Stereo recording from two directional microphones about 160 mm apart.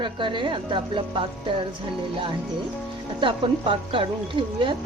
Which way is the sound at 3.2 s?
35° right (ahead or behind).